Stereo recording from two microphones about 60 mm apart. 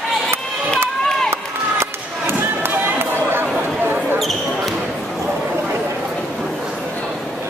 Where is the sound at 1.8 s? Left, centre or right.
Right.